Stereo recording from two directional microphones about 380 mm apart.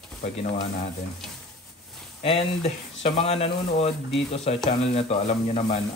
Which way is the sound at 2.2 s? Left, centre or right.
Centre.